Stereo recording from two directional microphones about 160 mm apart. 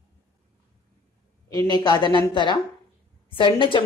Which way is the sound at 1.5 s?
25° left (ahead or behind).